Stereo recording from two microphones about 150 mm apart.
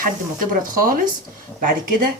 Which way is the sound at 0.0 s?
70° right (ahead or behind).